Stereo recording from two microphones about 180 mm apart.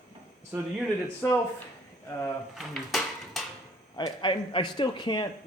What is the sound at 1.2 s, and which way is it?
Speech, 10° left (ahead or behind).